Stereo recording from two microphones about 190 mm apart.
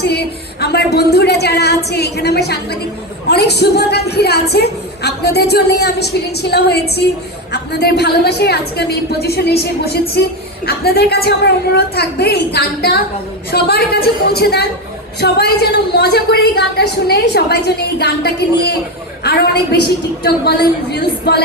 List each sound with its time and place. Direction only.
0.0 s a woman's voice: 60° left (ahead or behind)